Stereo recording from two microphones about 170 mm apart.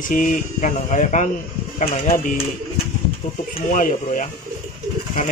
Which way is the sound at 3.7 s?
50° left (ahead or behind).